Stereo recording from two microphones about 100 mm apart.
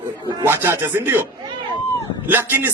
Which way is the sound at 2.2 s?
20° right (ahead or behind).